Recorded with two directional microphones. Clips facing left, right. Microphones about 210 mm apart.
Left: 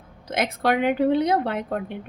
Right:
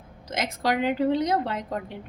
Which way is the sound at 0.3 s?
60° left (ahead or behind).